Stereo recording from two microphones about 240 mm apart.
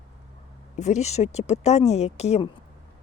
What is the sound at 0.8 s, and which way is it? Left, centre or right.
Speech, left.